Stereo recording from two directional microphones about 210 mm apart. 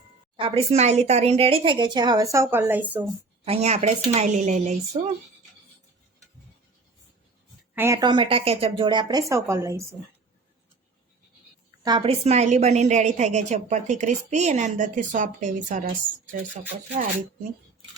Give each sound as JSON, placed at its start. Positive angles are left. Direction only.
{"t": 0.3, "sound": "a woman's voice", "side_deg": -25}
{"t": 3.4, "sound": "a woman's voice", "side_deg": -30}
{"t": 7.8, "sound": "a woman's voice", "side_deg": -15}
{"t": 11.9, "sound": "a woman's voice", "side_deg": -25}